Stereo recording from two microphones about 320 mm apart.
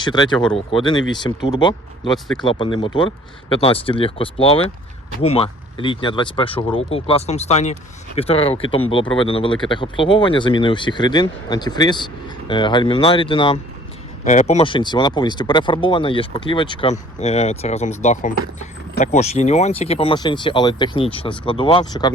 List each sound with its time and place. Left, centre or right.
0.0 s speech: centre
2.1 s speech: centre
2.4 s speech: centre